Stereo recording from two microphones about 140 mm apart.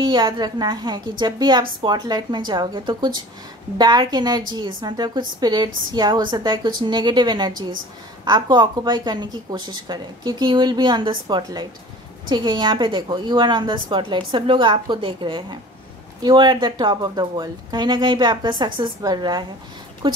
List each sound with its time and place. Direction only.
0.0 s a woman's voice: 35° right (ahead or behind)